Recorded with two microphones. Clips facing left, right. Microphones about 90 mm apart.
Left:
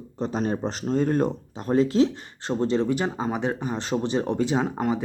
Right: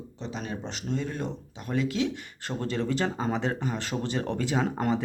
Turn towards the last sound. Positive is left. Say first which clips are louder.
# left 2 dB
turn(degrees=10)  # may be behind; listen again after turning